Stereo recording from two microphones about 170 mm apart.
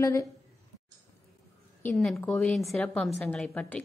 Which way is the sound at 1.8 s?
5° left (ahead or behind).